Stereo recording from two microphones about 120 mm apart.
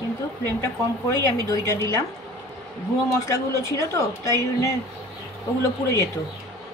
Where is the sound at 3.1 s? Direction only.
25° left (ahead or behind).